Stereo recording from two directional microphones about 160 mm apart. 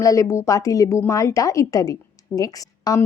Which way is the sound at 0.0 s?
20° left (ahead or behind).